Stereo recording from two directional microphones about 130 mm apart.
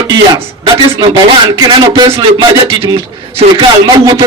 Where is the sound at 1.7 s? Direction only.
40° right (ahead or behind).